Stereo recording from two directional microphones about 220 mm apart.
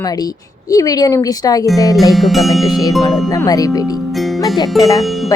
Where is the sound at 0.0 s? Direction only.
15° left (ahead or behind).